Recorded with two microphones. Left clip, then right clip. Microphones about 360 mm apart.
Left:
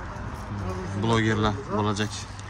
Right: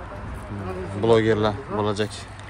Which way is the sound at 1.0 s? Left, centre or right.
Centre.